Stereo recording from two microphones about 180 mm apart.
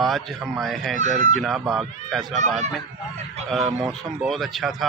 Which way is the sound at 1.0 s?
40° right (ahead or behind).